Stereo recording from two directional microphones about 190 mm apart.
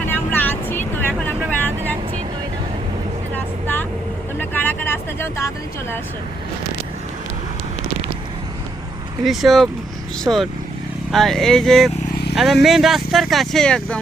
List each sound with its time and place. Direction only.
0.1 s vehicle: 10° left (ahead or behind)
3.3 s vehicle: 10° left (ahead or behind)
9.2 s speech: centre (ahead or behind)
12.1 s vehicle: 60° left (ahead or behind)
12.6 s speech: centre (ahead or behind)